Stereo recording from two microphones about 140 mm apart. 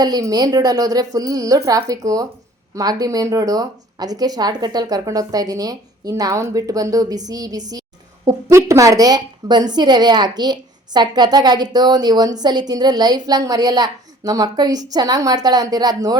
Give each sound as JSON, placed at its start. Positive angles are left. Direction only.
{"t": 0.0, "sound": "a woman's voice", "side_deg": -25}